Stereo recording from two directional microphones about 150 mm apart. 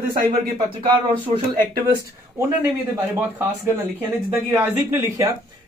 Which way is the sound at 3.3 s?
15° right (ahead or behind).